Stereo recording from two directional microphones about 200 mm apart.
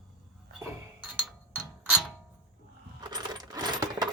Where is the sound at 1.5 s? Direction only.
5° right (ahead or behind).